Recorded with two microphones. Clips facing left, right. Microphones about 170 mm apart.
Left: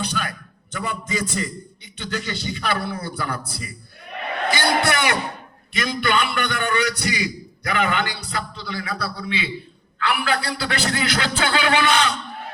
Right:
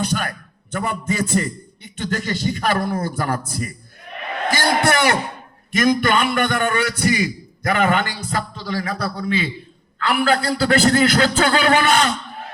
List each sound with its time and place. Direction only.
0.0 s a man's voice: 45° right (ahead or behind)
4.5 s a sound: 40° right (ahead or behind)
5.7 s a man's voice: 45° right (ahead or behind)